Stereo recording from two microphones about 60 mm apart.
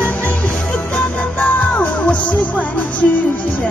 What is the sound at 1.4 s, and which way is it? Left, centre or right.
Music, left.